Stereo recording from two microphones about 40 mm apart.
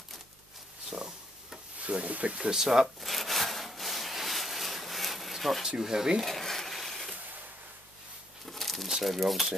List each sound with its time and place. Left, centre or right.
1.8 s speech: right
2.5 s rub: centre
5.7 s speech: centre
6.2 s a sound: centre
8.5 s a sound: centre
8.8 s speech: centre